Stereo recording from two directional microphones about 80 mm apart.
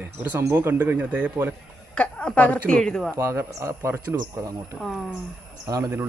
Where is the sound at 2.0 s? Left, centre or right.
Centre.